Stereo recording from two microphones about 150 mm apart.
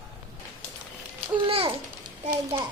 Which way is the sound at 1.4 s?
40° right (ahead or behind).